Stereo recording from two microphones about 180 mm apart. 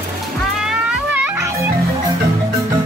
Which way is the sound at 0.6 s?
5° right (ahead or behind).